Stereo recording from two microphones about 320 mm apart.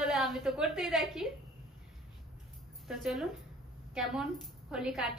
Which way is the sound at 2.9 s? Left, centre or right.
Centre.